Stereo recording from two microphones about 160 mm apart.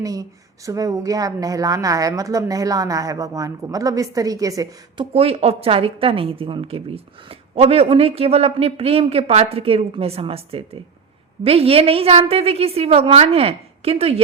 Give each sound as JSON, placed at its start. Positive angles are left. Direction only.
{"t": 0.0, "sound": "speech", "side_deg": -20}
{"t": 5.1, "sound": "a woman's voice", "side_deg": -40}